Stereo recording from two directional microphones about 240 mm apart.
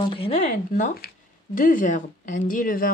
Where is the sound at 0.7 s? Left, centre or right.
Left.